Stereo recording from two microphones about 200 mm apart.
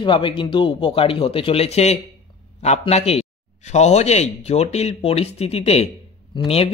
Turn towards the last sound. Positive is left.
turn(degrees=25)  # may be behind; listen again after turning